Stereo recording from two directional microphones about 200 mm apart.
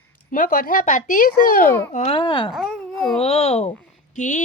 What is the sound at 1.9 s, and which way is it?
Speech, 35° left (ahead or behind).